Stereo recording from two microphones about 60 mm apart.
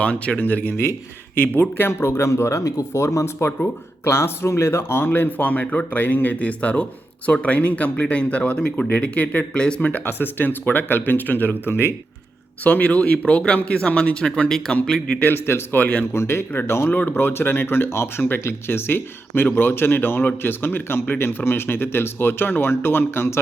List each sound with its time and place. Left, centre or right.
0.0 s speech: left
1.9 s speech: left
4.0 s speech: left; by 9.9 s centre
9.9 s speech: left
11.7 s speech: left
12.6 s speech: left; by 15.2 s centre
15.2 s speech: left
15.8 s speech: left
16.1 s speech: left
16.9 s speech: left